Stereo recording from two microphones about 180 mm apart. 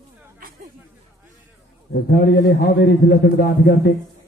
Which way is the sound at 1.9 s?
65° left (ahead or behind).